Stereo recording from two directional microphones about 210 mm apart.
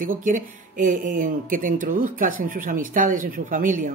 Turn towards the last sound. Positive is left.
turn(degrees=-40)  # may be behind; listen again after turning